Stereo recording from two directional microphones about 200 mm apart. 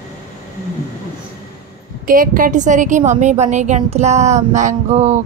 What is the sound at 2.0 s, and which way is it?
A woman's voice, 45° right (ahead or behind).